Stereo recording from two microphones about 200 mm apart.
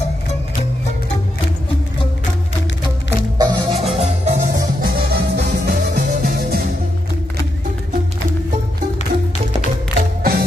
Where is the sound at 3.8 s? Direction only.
30° right (ahead or behind).